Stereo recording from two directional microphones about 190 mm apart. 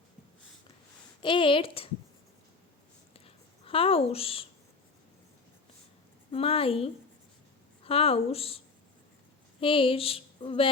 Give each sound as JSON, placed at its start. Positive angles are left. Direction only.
{"t": 1.2, "sound": "a woman's voice", "side_deg": 25}
{"t": 3.1, "sound": "a sound", "side_deg": 30}
{"t": 6.3, "sound": "speech", "side_deg": 30}